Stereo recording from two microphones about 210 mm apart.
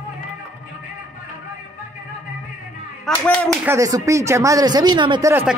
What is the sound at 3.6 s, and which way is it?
Speech, 15° right (ahead or behind).